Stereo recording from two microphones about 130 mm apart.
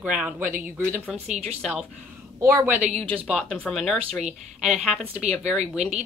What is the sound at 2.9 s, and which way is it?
Speech, 45° right (ahead or behind).